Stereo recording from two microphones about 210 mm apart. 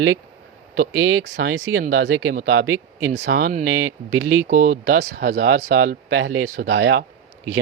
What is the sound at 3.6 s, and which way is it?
Speech, 90° right.